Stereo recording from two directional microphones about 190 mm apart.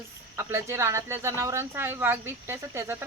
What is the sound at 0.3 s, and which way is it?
A woman's voice, 15° right (ahead or behind).